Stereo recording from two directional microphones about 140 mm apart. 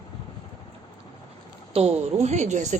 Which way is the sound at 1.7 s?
45° right (ahead or behind).